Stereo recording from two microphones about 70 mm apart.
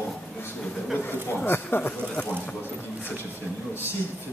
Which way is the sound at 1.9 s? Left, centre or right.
Centre.